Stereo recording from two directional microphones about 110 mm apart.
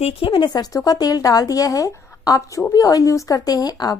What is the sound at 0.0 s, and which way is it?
A woman's voice, 55° left (ahead or behind).